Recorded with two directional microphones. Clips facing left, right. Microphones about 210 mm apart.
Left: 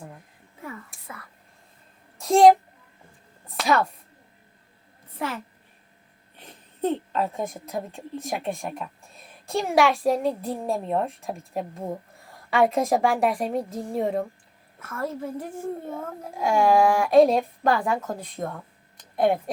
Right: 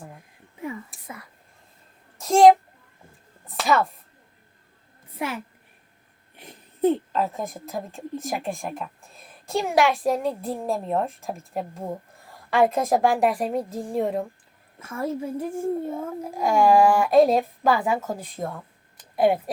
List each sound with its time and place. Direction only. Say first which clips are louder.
1.0 s whispering: right 2 dB; 15° right (ahead or behind)
2.1 s a woman's voice: right 1 dB; centre (ahead or behind)
3.6 s speech: right 1 dB; centre (ahead or behind)
5.2 s a child's voice: right 1 dB; 15° right (ahead or behind)
14.8 s a child's voice: right 2 dB; 15° right (ahead or behind)
18.9 s a sound: right 2 dB; 5° right (ahead or behind)